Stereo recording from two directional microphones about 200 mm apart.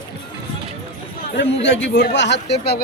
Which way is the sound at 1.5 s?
65° left (ahead or behind).